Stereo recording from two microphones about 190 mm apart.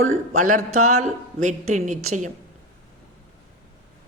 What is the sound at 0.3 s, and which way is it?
A woman's voice, 40° right (ahead or behind).